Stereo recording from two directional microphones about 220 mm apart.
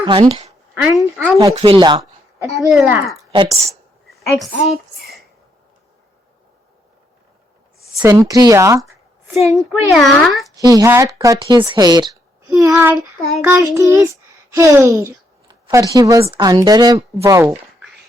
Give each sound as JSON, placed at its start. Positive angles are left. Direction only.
{"t": 0.0, "sound": "speech", "side_deg": -25}
{"t": 0.7, "sound": "speech", "side_deg": -5}
{"t": 1.4, "sound": "speech", "side_deg": -20}
{"t": 2.6, "sound": "speech", "side_deg": 0}
{"t": 3.3, "sound": "speech", "side_deg": -25}
{"t": 4.1, "sound": "a woman's voice", "side_deg": 0}
{"t": 7.9, "sound": "speech", "side_deg": -10}
{"t": 9.9, "sound": "speech", "side_deg": 0}
{"t": 10.5, "sound": "speech", "side_deg": -15}
{"t": 12.7, "sound": "speech", "side_deg": -5}